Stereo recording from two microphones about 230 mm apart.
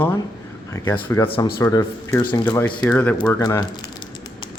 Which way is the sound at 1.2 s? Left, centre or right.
Left.